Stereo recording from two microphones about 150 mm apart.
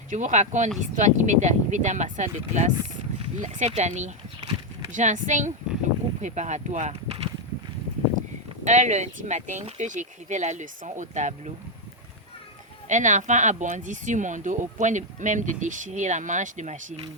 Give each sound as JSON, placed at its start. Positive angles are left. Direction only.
{"t": 0.1, "sound": "speech", "side_deg": -55}
{"t": 8.6, "sound": "speech", "side_deg": -50}
{"t": 12.9, "sound": "speech", "side_deg": -55}